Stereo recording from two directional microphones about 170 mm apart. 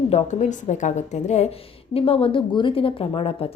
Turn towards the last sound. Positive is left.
turn(degrees=35)  # may be behind; listen again after turning